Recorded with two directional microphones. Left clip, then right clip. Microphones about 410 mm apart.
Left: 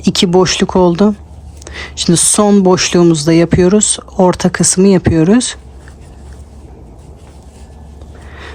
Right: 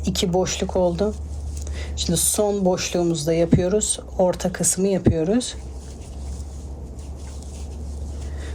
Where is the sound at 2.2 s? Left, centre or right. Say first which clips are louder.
Left 10 dB; centre.